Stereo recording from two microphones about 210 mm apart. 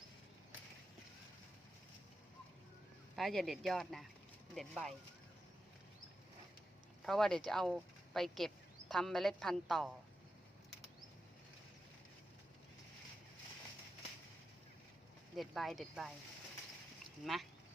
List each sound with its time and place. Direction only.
3.2 s speech: centre (ahead or behind)
7.0 s speech: centre (ahead or behind)
15.4 s speech: centre (ahead or behind)